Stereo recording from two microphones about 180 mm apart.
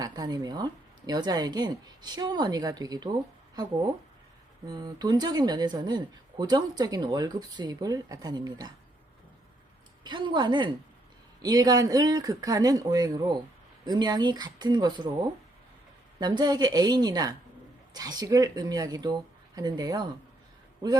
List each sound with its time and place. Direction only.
0.0 s speech: 20° right (ahead or behind)
10.0 s speech: 25° right (ahead or behind)
16.2 s speech: 25° right (ahead or behind)